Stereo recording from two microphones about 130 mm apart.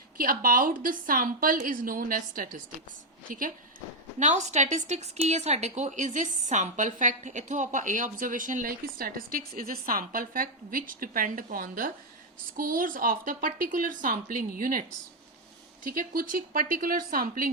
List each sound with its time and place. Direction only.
0.2 s a woman's voice: 90° right
4.2 s a woman's voice: 65° right (ahead or behind); by 17.5 s 90° right